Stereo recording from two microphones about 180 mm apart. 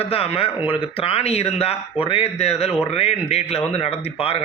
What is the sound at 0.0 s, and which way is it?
Speech, 35° left (ahead or behind).